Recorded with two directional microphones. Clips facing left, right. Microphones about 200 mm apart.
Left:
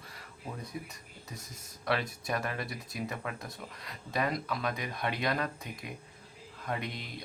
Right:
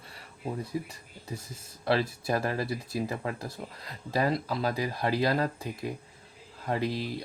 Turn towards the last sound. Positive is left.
turn(degrees=-30)  # may be behind; listen again after turning